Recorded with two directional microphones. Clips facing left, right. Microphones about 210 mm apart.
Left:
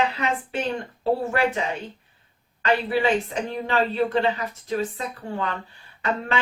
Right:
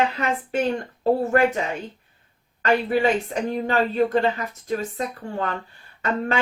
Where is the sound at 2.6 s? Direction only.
45° right (ahead or behind).